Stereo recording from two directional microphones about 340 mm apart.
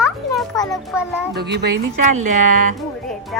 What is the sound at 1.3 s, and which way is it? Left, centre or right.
Speech, right.